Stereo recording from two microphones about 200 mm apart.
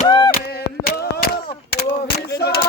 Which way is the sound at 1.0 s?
55° left (ahead or behind).